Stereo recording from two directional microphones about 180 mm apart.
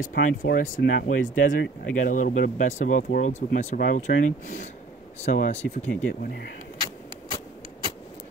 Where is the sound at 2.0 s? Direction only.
45° left (ahead or behind).